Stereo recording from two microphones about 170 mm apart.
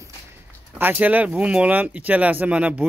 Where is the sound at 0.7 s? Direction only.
10° right (ahead or behind).